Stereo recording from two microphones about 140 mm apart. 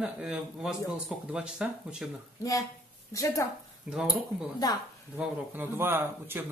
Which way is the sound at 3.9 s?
5° right (ahead or behind).